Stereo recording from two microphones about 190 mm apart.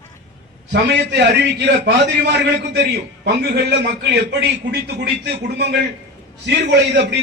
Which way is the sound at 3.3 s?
65° right (ahead or behind).